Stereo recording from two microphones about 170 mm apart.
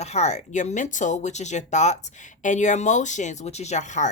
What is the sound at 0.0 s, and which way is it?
Speech, 40° left (ahead or behind).